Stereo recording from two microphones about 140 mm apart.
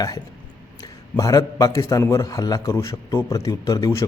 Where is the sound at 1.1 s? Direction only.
25° left (ahead or behind).